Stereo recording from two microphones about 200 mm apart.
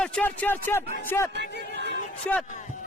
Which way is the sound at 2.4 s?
40° left (ahead or behind).